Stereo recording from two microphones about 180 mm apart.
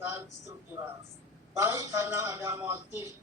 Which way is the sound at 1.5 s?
15° right (ahead or behind).